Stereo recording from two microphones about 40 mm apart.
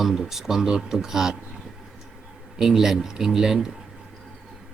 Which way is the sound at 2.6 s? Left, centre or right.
Centre.